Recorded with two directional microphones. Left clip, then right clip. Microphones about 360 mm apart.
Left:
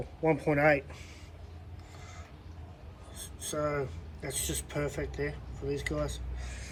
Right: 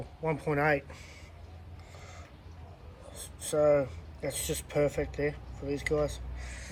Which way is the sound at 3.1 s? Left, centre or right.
Centre.